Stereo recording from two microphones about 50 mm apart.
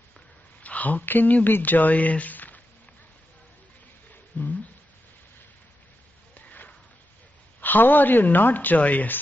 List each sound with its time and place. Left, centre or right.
0.6 s speech: left
4.3 s speech: left
6.3 s sniff: left
7.6 s speech: left